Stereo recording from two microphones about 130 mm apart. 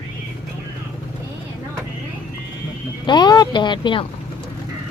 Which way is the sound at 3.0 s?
35° left (ahead or behind).